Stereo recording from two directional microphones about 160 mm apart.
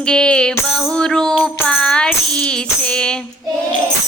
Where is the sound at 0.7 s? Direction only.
Centre (ahead or behind).